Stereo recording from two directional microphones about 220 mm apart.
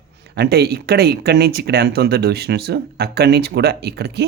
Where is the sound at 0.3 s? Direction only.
45° right (ahead or behind).